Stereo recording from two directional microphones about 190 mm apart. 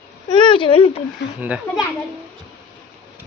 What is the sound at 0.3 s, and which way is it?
Speech, 25° left (ahead or behind).